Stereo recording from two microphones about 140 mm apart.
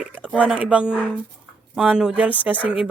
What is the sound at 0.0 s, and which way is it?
Speech, 10° right (ahead or behind).